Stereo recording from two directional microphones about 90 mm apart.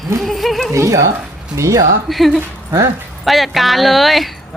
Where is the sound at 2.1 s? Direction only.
Centre (ahead or behind).